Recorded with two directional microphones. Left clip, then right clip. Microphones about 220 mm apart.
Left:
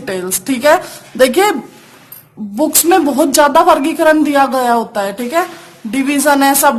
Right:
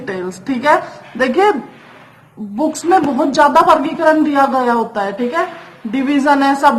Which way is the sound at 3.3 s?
50° left (ahead or behind).